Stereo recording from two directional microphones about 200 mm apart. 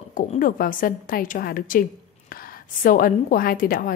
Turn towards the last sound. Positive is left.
turn(degrees=45)  # may be behind; listen again after turning